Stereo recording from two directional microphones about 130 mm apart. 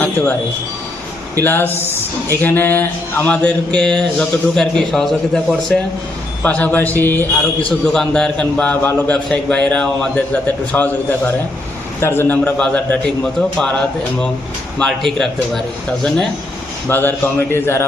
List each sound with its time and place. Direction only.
1.4 s a man's voice: 15° left (ahead or behind)
16.9 s speech: 15° left (ahead or behind)